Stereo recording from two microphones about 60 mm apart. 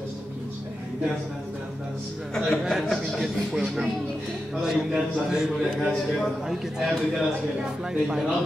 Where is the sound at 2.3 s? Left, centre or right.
Centre.